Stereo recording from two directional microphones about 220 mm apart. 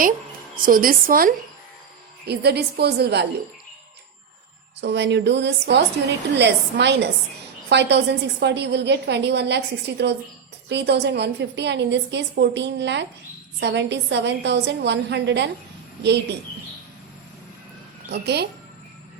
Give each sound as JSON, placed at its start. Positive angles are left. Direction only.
{"t": 0.5, "sound": "a woman's voice", "side_deg": -40}
{"t": 4.8, "sound": "a woman's voice", "side_deg": -50}
{"t": 18.1, "sound": "a woman's voice", "side_deg": -50}